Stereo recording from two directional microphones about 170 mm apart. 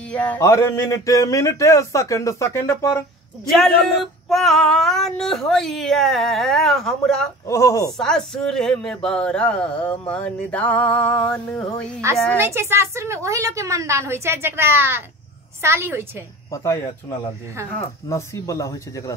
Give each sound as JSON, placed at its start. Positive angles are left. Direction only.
{"t": 0.1, "sound": "speech", "side_deg": 10}
{"t": 3.4, "sound": "female singing", "side_deg": 0}
{"t": 7.4, "sound": "speech", "side_deg": 15}
{"t": 8.0, "sound": "speech", "side_deg": 5}
{"t": 12.0, "sound": "a woman's voice", "side_deg": -15}
{"t": 16.5, "sound": "speech", "side_deg": 15}